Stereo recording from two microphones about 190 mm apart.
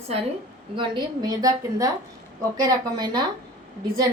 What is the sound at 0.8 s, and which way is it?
A woman's voice, 20° right (ahead or behind).